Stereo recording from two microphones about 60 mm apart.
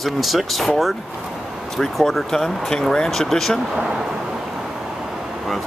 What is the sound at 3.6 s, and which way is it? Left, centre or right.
Vehicle, centre.